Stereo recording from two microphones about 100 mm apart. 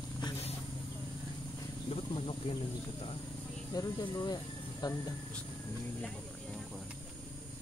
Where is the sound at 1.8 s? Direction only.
65° left (ahead or behind).